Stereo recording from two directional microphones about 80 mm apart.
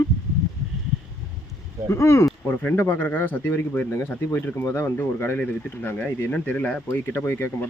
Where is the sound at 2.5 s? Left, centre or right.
Left.